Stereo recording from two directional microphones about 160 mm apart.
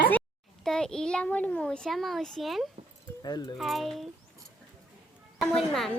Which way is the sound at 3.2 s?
25° left (ahead or behind).